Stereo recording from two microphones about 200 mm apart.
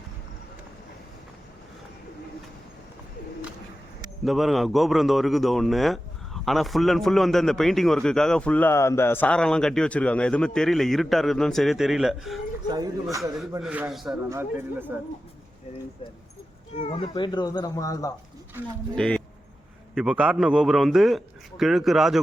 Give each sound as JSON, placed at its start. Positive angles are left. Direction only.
{"t": 4.2, "sound": "a man's voice", "side_deg": 0}
{"t": 12.6, "sound": "a man's voice", "side_deg": -20}
{"t": 16.7, "sound": "speech", "side_deg": 30}
{"t": 18.9, "sound": "a man's voice", "side_deg": 5}